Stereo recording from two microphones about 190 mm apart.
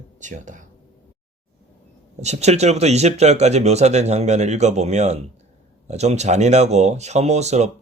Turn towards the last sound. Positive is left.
turn(degrees=-35)  # may be behind; listen again after turning